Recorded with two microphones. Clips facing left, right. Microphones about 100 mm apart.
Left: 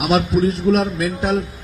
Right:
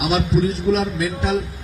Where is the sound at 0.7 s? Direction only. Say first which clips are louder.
Left 2 dB; 55° left (ahead or behind).